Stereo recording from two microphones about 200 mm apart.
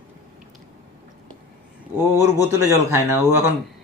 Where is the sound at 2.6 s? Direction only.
15° right (ahead or behind).